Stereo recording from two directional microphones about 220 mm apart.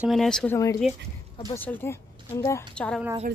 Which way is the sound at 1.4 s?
10° left (ahead or behind).